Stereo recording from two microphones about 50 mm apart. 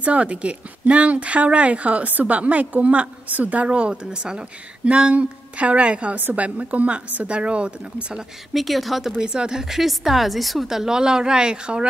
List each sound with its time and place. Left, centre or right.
0.0 s speech: right
8.5 s speech: centre
9.2 s speech: centre